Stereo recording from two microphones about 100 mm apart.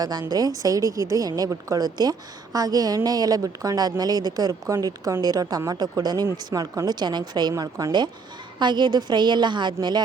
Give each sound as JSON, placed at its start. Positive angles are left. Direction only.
{"t": 0.0, "sound": "a woman's voice", "side_deg": -40}
{"t": 7.6, "sound": "a woman's voice", "side_deg": -35}
{"t": 8.5, "sound": "speech", "side_deg": -50}